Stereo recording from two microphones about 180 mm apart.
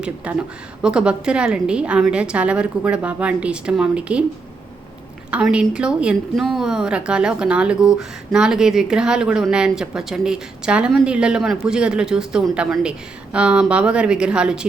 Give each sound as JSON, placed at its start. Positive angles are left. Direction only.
{"t": 0.0, "sound": "a woman's voice", "side_deg": -5}
{"t": 5.3, "sound": "a woman's voice", "side_deg": -5}